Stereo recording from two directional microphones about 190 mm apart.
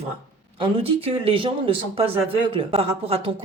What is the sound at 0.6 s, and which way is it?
Speech, 30° right (ahead or behind).